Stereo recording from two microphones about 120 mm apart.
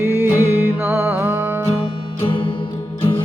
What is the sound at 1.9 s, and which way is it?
Music, 40° left (ahead or behind).